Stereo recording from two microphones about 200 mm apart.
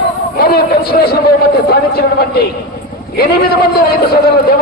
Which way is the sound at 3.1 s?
50° left (ahead or behind).